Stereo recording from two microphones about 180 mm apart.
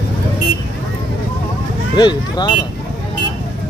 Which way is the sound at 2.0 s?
25° left (ahead or behind).